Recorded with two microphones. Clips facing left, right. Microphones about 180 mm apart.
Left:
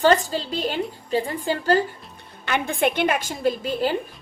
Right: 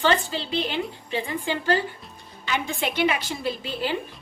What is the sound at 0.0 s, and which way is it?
A woman's voice, 40° left (ahead or behind).